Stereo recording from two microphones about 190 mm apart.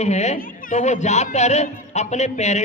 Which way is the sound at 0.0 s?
35° left (ahead or behind).